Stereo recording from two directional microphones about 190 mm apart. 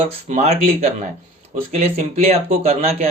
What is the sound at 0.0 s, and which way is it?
Speech, 35° right (ahead or behind).